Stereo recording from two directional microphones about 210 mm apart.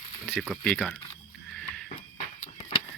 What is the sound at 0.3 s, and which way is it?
Speech, 5° right (ahead or behind).